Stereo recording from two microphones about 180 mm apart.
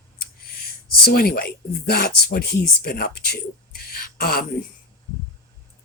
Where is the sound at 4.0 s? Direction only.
55° left (ahead or behind).